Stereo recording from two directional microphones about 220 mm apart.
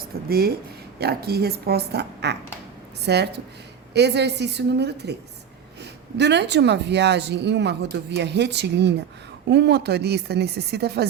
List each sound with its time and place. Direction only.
0.3 s speech: 45° right (ahead or behind)
6.1 s speech: 50° right (ahead or behind)